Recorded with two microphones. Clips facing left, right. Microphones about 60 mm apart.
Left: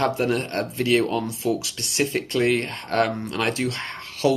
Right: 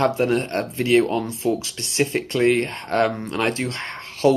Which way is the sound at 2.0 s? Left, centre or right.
Centre.